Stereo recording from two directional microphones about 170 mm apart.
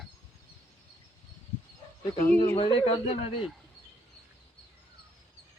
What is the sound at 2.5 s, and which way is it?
Speech, 30° left (ahead or behind).